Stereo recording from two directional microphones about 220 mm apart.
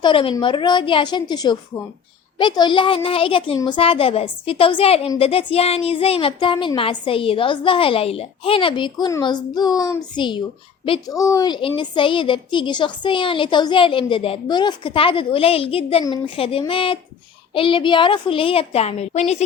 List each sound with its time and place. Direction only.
0.0 s a woman's voice: 25° left (ahead or behind)